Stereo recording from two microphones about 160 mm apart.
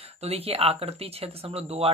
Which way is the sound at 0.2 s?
40° right (ahead or behind).